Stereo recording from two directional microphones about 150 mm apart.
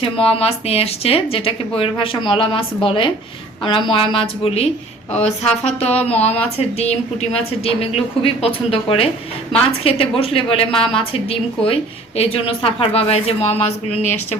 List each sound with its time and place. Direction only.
0.0 s speech: 40° left (ahead or behind)
5.9 s speech: 10° left (ahead or behind)
6.6 s speech: 45° left (ahead or behind)